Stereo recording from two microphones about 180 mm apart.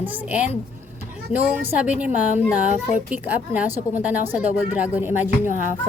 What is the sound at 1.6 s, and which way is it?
A woman's voice, 10° right (ahead or behind).